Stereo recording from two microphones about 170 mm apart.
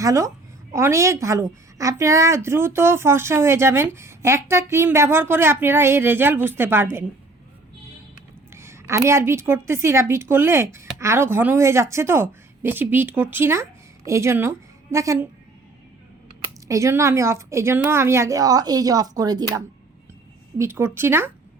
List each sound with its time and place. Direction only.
0.0 s a woman's voice: 20° right (ahead or behind)
8.5 s a woman's voice: 15° right (ahead or behind)
16.6 s a woman's voice: 15° right (ahead or behind)